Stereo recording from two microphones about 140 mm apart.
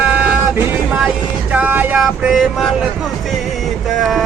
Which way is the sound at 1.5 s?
10° right (ahead or behind).